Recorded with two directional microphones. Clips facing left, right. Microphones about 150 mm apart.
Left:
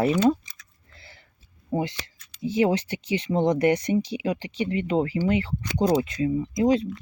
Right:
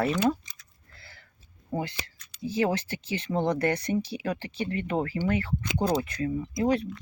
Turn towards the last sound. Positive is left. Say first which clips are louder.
# left 4 dB
turn(degrees=20)  # may be behind; listen again after turning